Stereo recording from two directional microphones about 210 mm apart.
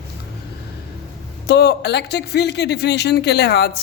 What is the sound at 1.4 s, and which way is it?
Speech, 50° left (ahead or behind).